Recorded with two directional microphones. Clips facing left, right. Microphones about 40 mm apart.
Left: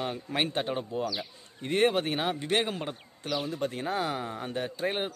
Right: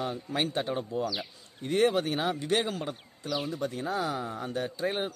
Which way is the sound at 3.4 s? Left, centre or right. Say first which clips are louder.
Left 1 dB; left.